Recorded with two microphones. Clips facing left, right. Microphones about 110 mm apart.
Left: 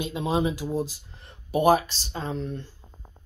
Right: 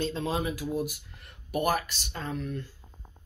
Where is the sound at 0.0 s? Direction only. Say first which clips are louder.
Left 4 dB; 15° left (ahead or behind).